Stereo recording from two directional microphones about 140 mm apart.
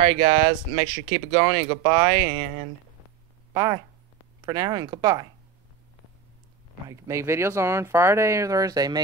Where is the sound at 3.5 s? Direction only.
25° right (ahead or behind).